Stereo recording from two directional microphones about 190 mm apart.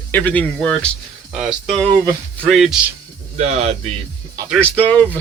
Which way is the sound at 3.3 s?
35° right (ahead or behind).